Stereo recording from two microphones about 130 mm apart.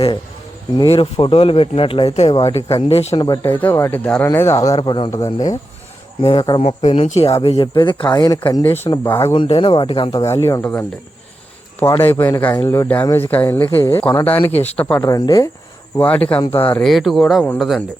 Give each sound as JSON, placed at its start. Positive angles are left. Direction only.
{"t": 0.9, "sound": "speech", "side_deg": 50}
{"t": 3.2, "sound": "speech", "side_deg": 30}
{"t": 3.6, "sound": "speech", "side_deg": 15}
{"t": 4.8, "sound": "speech", "side_deg": 40}
{"t": 5.1, "sound": "speech", "side_deg": 20}
{"t": 6.2, "sound": "speech", "side_deg": 35}
{"t": 6.6, "sound": "speech", "side_deg": 55}
{"t": 9.6, "sound": "speech", "side_deg": 40}
{"t": 10.2, "sound": "speech", "side_deg": 20}
{"t": 11.8, "sound": "speech", "side_deg": 15}
{"t": 15.0, "sound": "speech", "side_deg": 30}
{"t": 16.0, "sound": "speech", "side_deg": 10}
{"t": 16.5, "sound": "speech", "side_deg": 45}
{"t": 16.8, "sound": "speech", "side_deg": 0}